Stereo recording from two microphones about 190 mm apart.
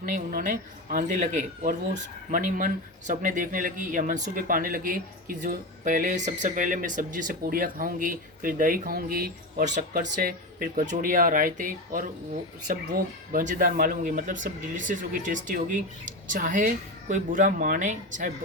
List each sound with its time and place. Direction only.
0.0 s speech: 50° right (ahead or behind)